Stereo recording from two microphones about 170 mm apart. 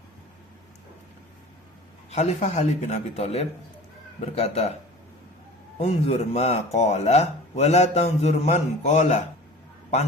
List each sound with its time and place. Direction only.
2.0 s a man's voice: 40° left (ahead or behind)
5.8 s a man's voice: 40° left (ahead or behind)